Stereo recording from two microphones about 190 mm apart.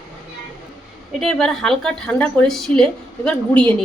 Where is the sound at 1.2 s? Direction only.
5° left (ahead or behind).